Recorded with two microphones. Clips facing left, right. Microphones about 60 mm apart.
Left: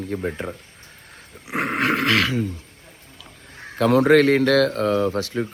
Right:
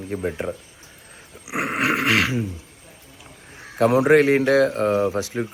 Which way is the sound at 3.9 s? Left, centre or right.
Centre.